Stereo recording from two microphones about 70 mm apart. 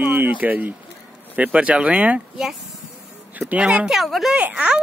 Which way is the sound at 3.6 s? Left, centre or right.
Centre.